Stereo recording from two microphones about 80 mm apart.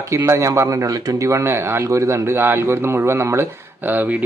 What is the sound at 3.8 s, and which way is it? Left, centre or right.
Speech, right.